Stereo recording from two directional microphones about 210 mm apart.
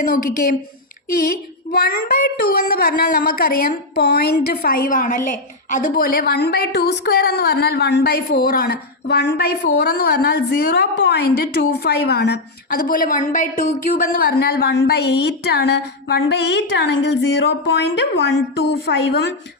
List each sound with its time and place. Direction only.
0.0 s a woman's voice: 45° left (ahead or behind)